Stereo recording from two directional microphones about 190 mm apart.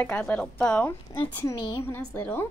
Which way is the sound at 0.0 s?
10° left (ahead or behind).